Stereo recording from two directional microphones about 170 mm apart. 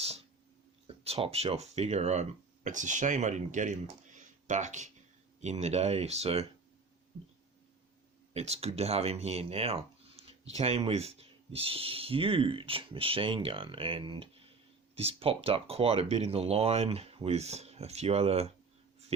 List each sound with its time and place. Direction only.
0.9 s speech: 35° right (ahead or behind)
8.3 s speech: 35° right (ahead or behind)